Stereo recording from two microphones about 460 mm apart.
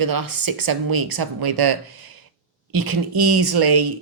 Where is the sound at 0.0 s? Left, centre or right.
Right.